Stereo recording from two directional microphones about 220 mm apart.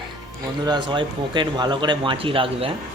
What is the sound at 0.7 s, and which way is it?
Speech, 20° right (ahead or behind).